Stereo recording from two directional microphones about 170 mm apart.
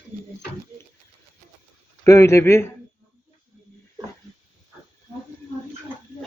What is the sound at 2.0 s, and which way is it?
Speech, 15° left (ahead or behind).